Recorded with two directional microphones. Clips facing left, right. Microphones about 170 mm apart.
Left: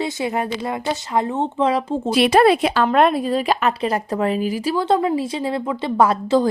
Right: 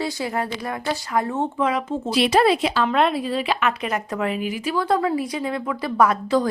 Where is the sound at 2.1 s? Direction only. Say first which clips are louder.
Left 4 dB; 55° left (ahead or behind).